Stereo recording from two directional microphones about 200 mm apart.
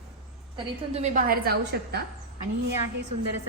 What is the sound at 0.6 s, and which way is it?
A woman's voice, 35° right (ahead or behind).